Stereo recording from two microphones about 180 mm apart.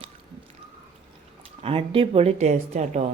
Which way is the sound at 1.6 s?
30° right (ahead or behind).